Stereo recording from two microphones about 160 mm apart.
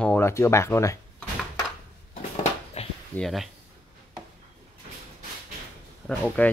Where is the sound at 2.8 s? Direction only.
40° left (ahead or behind).